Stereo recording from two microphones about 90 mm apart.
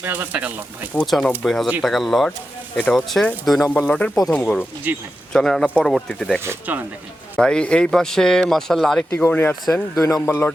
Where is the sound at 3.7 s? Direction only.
15° left (ahead or behind).